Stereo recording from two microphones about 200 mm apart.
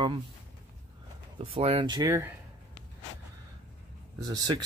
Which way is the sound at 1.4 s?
30° right (ahead or behind).